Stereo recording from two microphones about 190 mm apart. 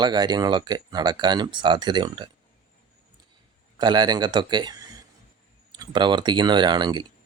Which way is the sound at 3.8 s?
20° right (ahead or behind).